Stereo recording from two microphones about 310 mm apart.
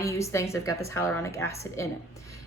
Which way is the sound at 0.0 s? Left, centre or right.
Centre.